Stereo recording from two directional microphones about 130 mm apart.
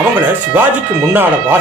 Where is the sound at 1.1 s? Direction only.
15° right (ahead or behind).